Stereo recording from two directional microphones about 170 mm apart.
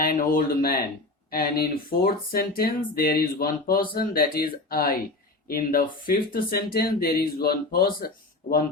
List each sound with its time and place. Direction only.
0.0 s speech: 55° left (ahead or behind)